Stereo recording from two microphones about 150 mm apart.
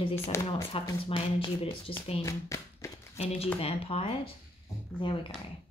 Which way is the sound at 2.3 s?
20° left (ahead or behind).